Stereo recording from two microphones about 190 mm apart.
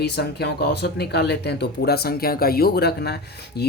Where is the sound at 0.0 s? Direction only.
60° left (ahead or behind).